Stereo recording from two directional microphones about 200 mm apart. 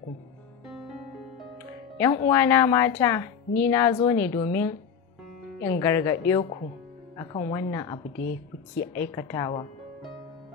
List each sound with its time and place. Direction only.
2.0 s a woman's voice: 15° left (ahead or behind)